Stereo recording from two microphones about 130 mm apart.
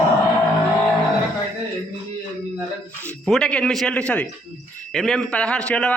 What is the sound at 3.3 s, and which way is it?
A man's voice, 5° left (ahead or behind).